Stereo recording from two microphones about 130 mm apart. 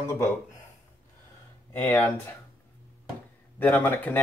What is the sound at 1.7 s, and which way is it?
Speech, 20° left (ahead or behind).